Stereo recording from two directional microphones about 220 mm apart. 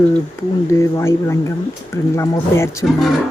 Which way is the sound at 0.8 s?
15° left (ahead or behind).